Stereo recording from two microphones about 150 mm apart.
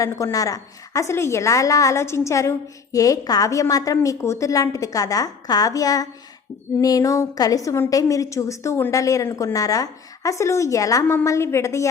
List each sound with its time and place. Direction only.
0.0 s a woman's voice: 20° left (ahead or behind)